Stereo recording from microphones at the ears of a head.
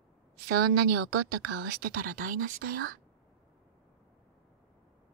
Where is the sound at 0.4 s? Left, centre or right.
Right.